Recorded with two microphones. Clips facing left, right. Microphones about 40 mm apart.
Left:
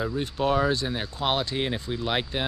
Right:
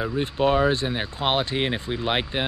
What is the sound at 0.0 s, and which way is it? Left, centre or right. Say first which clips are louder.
Speech: right 4 dB; right.